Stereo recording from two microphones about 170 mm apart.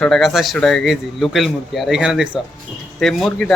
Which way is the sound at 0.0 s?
Centre (ahead or behind).